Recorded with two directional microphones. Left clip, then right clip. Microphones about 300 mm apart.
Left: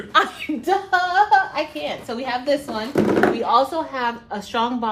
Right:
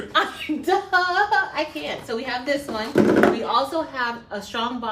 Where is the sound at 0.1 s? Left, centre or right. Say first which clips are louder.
Left 4 dB; left.